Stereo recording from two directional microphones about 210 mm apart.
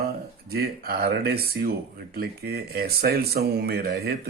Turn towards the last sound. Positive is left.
turn(degrees=-50)  # may be behind; listen again after turning